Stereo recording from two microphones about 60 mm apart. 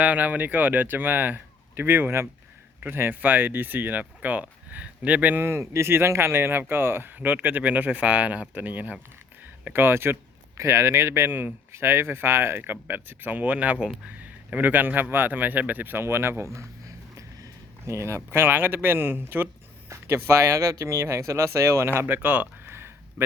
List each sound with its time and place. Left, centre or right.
0.0 s speech: right
5.4 s speech: right
10.6 s speech: right
11.3 s speech: right
11.7 s a man's voice: right
17.2 s speech: right
22.7 s a sound: right